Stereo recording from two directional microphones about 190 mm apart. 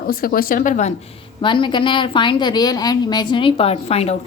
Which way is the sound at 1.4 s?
25° left (ahead or behind).